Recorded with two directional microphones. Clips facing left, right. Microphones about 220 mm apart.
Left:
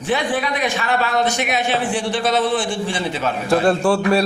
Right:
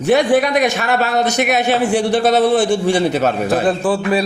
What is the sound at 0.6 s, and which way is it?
A man's voice, 40° right (ahead or behind).